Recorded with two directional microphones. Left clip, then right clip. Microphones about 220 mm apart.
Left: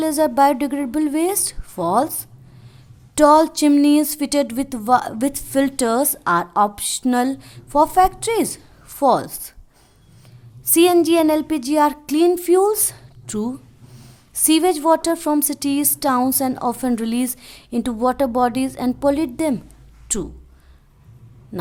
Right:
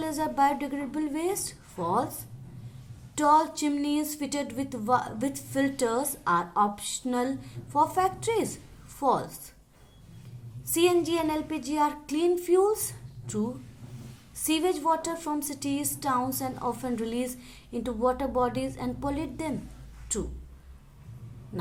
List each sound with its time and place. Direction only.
0.0 s a woman's voice: 50° left (ahead or behind)
3.2 s a woman's voice: 50° left (ahead or behind)
10.7 s a woman's voice: 50° left (ahead or behind)
21.5 s hum: 45° left (ahead or behind)